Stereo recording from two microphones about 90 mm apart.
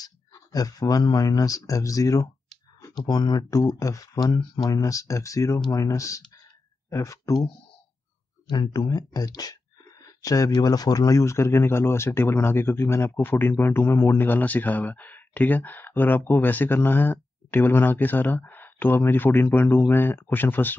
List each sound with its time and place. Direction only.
0.0 s speech: 45° left (ahead or behind)
3.0 s speech: 50° left (ahead or behind)
8.5 s speech: 55° left (ahead or behind); by 20.7 s 20° left (ahead or behind)